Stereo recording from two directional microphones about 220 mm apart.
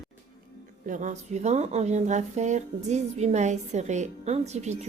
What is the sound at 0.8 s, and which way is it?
A woman's voice, 35° right (ahead or behind).